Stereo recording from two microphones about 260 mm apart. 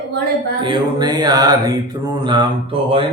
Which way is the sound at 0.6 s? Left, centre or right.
Centre.